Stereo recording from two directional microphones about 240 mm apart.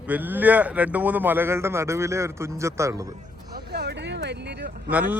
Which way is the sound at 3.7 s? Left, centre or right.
Right.